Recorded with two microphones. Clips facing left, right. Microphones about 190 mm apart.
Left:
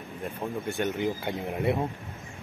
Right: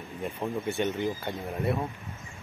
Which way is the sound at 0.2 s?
Centre (ahead or behind).